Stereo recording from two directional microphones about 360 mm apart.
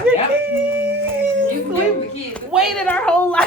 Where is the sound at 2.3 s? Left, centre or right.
Centre.